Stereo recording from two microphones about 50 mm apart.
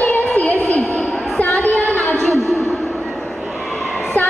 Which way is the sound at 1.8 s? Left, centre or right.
Left.